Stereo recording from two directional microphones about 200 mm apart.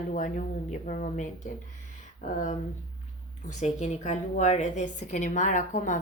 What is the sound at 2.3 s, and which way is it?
Speech, 35° left (ahead or behind).